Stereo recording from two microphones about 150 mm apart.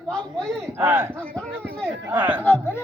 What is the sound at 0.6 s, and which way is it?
Speech, 15° right (ahead or behind).